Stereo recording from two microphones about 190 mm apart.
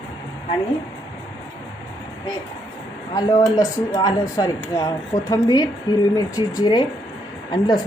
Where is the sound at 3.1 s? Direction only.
20° left (ahead or behind).